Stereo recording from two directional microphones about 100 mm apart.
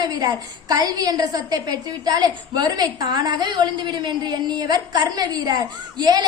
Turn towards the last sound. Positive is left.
turn(degrees=-45)  # may be behind; listen again after turning